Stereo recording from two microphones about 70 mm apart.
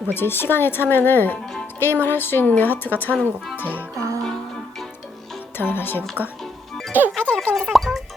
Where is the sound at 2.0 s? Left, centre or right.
Left.